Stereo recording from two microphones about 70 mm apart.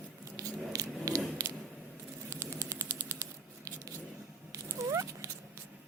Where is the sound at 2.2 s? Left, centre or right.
Right.